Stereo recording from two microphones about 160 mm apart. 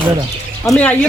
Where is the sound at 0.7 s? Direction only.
10° left (ahead or behind).